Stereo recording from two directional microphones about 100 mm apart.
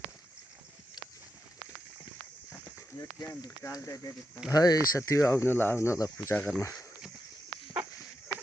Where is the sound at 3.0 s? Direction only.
40° left (ahead or behind).